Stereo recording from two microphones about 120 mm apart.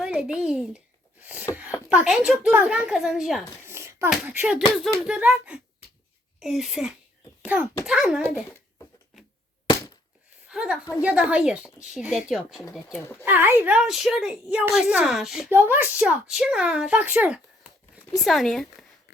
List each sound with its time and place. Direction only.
0.0 s a child's voice: 5° right (ahead or behind)
3.7 s a sound: 20° right (ahead or behind)
4.1 s speech: 10° right (ahead or behind)
4.8 s a woman's voice: 5° left (ahead or behind)
5.0 s a woman's voice: 10° right (ahead or behind)
10.5 s a woman's voice: 5° right (ahead or behind)
13.2 s a woman's voice: 15° right (ahead or behind)
15.4 s speech: 15° right (ahead or behind)
18.3 s a woman's voice: centre (ahead or behind)